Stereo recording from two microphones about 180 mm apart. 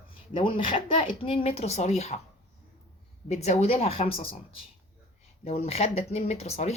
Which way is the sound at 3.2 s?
40° left (ahead or behind).